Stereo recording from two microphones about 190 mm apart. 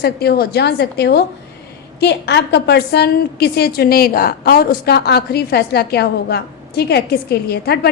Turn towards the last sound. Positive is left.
turn(degrees=55)  # may be behind; listen again after turning